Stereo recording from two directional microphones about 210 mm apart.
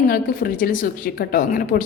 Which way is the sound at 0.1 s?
45° left (ahead or behind).